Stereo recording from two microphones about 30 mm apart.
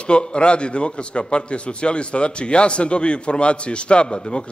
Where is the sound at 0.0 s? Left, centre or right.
Left.